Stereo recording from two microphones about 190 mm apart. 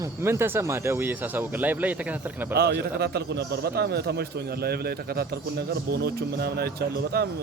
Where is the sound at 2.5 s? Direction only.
55° right (ahead or behind).